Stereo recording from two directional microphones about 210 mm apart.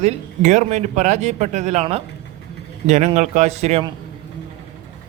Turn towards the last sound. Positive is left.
turn(degrees=-30)  # may be behind; listen again after turning